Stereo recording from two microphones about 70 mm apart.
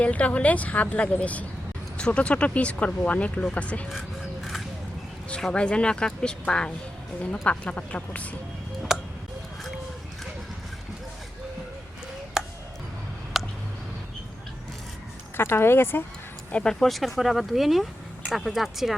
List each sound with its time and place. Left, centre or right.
0.0 s speech: centre
5.5 s speech: centre
8.9 s tick: centre
12.4 s chop: centre
13.3 s a sound: centre
15.4 s speech: left
16.5 s speech: centre
16.8 s speech: centre